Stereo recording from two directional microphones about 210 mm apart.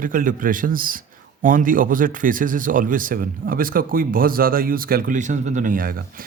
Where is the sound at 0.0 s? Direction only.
40° right (ahead or behind).